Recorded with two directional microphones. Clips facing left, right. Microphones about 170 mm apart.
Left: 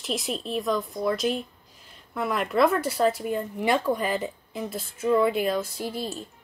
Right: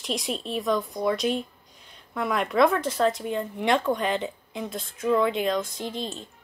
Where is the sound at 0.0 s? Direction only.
Centre (ahead or behind).